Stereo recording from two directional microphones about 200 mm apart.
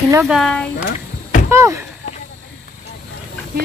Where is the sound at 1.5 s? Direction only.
15° right (ahead or behind).